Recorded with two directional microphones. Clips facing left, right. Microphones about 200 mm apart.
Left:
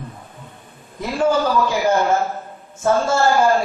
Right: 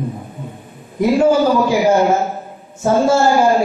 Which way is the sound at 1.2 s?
10° right (ahead or behind).